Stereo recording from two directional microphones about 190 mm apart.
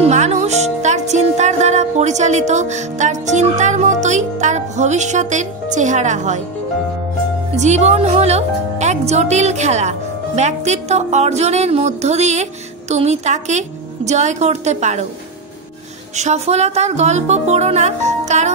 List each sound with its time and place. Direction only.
0.0 s music: 35° right (ahead or behind)
7.5 s speech: 35° right (ahead or behind)
16.2 s speech: 35° right (ahead or behind)